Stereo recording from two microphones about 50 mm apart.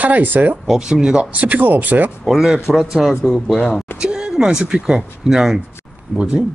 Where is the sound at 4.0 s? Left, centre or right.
Centre.